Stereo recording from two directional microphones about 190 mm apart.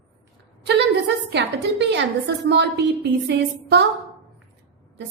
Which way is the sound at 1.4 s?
65° right (ahead or behind).